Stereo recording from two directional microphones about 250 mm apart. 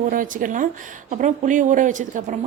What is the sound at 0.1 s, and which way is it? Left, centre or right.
A woman's voice, right.